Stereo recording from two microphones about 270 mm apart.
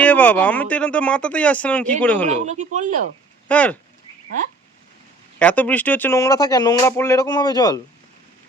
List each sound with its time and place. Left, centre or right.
0.0 s speech: centre
2.2 s speech: right
3.5 s speech: centre
5.4 s speech: centre